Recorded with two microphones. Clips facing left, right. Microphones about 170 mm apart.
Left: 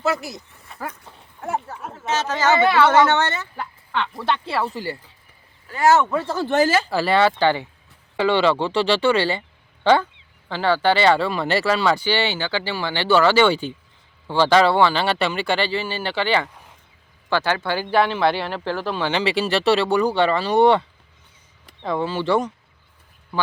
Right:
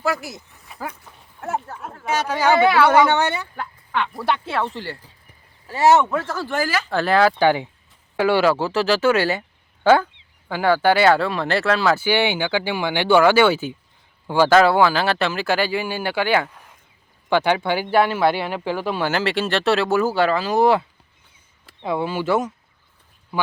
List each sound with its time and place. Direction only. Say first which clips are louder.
0.0 s speech: left 1 dB; centre (ahead or behind)
0.7 s dog: even; centre (ahead or behind)
1.4 s speech: even; centre (ahead or behind)
2.0 s speech: right 1 dB; 10° right (ahead or behind)
3.5 s fowl: right 1 dB; centre (ahead or behind)
4.0 s speech: right 1 dB; 5° right (ahead or behind)
5.6 s speech: right 1 dB; 25° right (ahead or behind)
6.2 s speech: left 5 dB; 20° left (ahead or behind)
6.9 s speech: right 1 dB; centre (ahead or behind)
7.3 s speech: right 2 dB; 15° right (ahead or behind)